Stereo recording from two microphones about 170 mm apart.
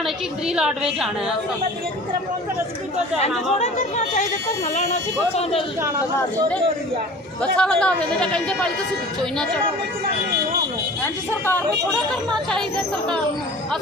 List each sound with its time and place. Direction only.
0.4 s speech: 5° right (ahead or behind)
3.2 s speech: 40° left (ahead or behind)
5.4 s a woman's voice: 35° left (ahead or behind)
7.5 s speech: 5° left (ahead or behind)
11.0 s a woman's voice: 15° left (ahead or behind)
11.9 s speech: 5° left (ahead or behind)